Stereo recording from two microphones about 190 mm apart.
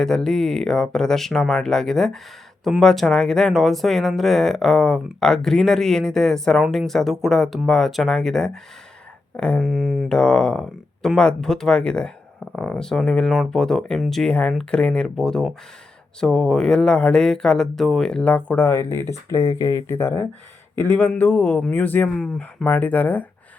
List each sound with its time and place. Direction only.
0.0 s speech: 5° left (ahead or behind)